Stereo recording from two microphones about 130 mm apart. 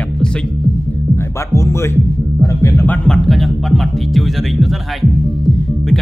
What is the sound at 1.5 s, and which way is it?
Speech, 20° left (ahead or behind).